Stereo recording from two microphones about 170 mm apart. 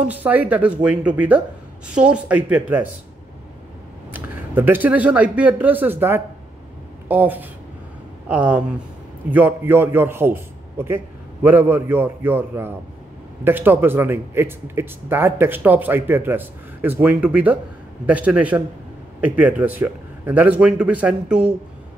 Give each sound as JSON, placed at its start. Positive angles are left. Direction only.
{"t": 0.0, "sound": "speech", "side_deg": -10}
{"t": 4.1, "sound": "speech", "side_deg": -10}